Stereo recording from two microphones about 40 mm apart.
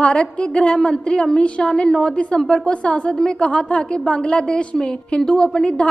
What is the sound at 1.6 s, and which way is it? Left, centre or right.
A woman's voice, centre.